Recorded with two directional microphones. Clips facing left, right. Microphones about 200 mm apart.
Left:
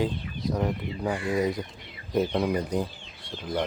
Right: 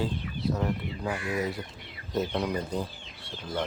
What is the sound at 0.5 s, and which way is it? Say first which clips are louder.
Speech: left 5 dB; 15° left (ahead or behind).